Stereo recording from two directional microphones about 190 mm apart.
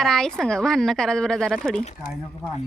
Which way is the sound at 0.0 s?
Centre (ahead or behind).